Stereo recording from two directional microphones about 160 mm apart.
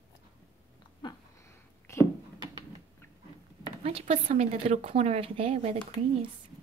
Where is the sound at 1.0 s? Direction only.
30° left (ahead or behind).